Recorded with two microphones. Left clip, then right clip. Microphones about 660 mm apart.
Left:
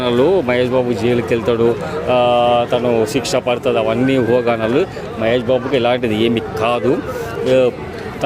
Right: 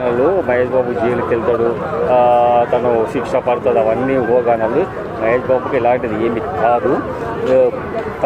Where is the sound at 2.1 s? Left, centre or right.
Left.